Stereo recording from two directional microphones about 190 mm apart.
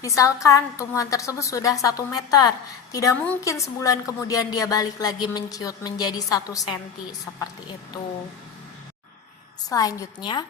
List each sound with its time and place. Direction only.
0.0 s a woman's voice: 15° left (ahead or behind)
9.6 s a woman's voice: 20° left (ahead or behind)